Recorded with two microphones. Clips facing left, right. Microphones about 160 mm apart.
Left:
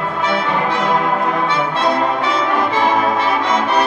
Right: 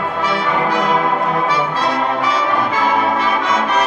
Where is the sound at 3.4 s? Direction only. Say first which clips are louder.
Left 1 dB; 30° left (ahead or behind).